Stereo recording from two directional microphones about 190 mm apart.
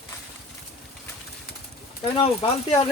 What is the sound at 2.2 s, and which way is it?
Speech, 30° left (ahead or behind).